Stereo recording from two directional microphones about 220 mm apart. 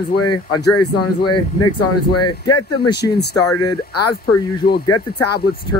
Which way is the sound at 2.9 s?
50° left (ahead or behind).